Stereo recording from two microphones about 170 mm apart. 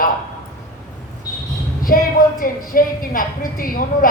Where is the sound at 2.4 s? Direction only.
55° left (ahead or behind).